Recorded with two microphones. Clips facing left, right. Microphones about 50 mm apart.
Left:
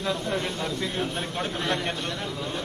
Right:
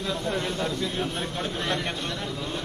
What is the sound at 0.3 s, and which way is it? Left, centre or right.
A man's voice, left.